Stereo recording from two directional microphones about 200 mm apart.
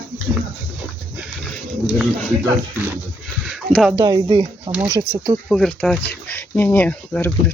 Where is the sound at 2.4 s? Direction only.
10° right (ahead or behind).